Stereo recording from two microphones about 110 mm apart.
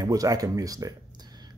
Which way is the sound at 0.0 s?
30° right (ahead or behind).